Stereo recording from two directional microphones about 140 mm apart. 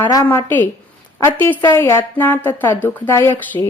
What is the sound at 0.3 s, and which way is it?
Speech, 15° left (ahead or behind).